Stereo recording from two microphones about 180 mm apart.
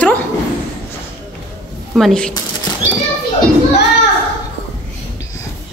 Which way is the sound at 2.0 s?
5° left (ahead or behind).